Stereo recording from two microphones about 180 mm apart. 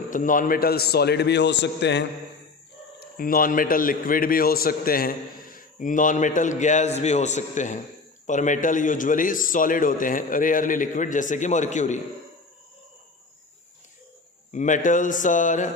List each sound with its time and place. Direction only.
0.1 s a man's voice: 45° left (ahead or behind); by 2.0 s 75° left (ahead or behind)
3.0 s a man's voice: 55° left (ahead or behind)
14.5 s a man's voice: 45° left (ahead or behind)